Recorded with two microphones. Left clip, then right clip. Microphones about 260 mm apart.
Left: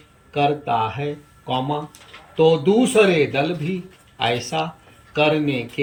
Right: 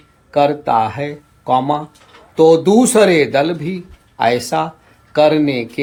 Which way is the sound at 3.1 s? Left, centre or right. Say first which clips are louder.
Right 6 dB; centre.